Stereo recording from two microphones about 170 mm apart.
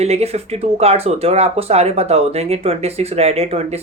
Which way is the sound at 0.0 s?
40° right (ahead or behind).